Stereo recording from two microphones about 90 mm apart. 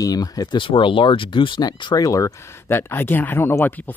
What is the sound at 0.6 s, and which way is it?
Speech, 70° left (ahead or behind).